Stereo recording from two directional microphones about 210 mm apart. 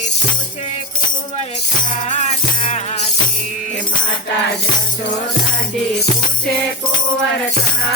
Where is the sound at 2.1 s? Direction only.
30° left (ahead or behind).